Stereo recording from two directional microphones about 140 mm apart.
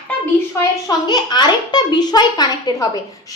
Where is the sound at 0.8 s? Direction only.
30° left (ahead or behind).